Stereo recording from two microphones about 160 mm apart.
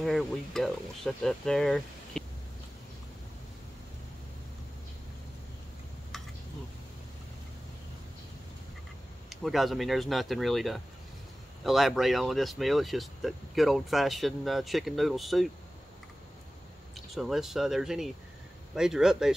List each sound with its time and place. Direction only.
0.0 s speech: centre (ahead or behind)
9.3 s speech: centre (ahead or behind)
16.9 s speech: centre (ahead or behind)